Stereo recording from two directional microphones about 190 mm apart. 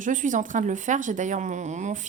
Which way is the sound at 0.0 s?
40° right (ahead or behind).